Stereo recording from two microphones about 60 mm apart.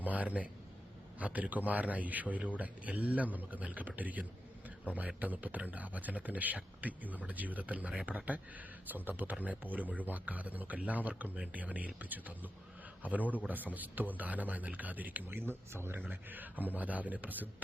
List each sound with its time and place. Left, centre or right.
0.0 s a man's voice: right
16.0 s a man's voice: right